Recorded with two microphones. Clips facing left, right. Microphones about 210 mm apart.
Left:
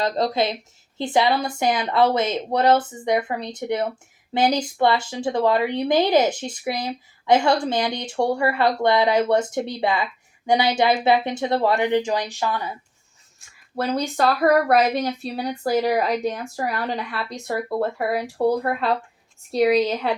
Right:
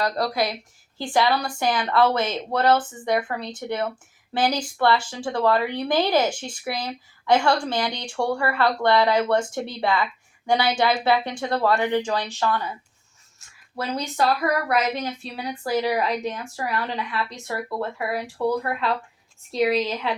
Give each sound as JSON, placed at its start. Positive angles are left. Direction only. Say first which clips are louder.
{"t": 0.0, "sound": "speech", "louder": "left 2 dB", "side_deg": 20}
{"t": 14.2, "sound": "a woman's voice", "louder": "left 4 dB", "side_deg": 50}
{"t": 14.8, "sound": "a woman's voice", "louder": "left 4 dB", "side_deg": 35}